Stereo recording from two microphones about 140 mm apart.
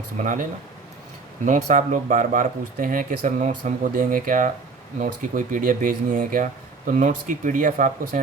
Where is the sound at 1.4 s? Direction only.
65° right (ahead or behind).